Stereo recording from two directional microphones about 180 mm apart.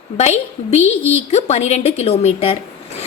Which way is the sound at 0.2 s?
40° left (ahead or behind).